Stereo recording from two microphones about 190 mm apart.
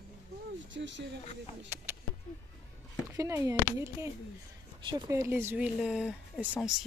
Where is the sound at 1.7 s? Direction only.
10° right (ahead or behind).